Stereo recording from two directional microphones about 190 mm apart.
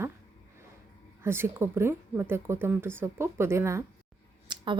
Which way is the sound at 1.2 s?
10° right (ahead or behind).